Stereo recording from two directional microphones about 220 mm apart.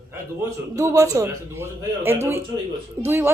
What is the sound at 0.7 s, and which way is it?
A woman's voice, 15° right (ahead or behind).